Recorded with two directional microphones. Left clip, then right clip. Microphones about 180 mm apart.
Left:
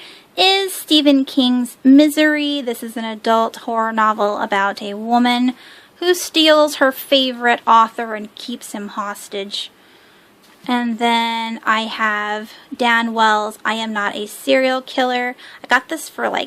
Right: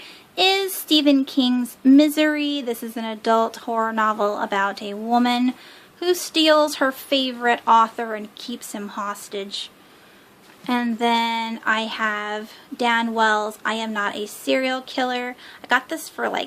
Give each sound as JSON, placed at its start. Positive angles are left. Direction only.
{"t": 0.3, "sound": "speech", "side_deg": 20}
{"t": 10.7, "sound": "speech", "side_deg": 15}